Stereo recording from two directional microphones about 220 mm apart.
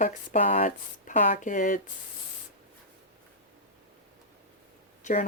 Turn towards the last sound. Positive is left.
turn(degrees=35)  # may be behind; listen again after turning